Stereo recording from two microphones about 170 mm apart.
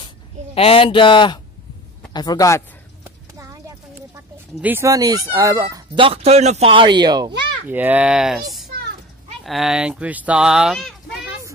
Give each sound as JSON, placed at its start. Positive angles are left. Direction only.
{"t": 0.6, "sound": "a man's voice", "side_deg": 35}
{"t": 3.0, "sound": "clip-clop", "side_deg": -15}
{"t": 4.6, "sound": "speech", "side_deg": -10}
{"t": 5.9, "sound": "speech", "side_deg": -35}
{"t": 7.6, "sound": "speech", "side_deg": -10}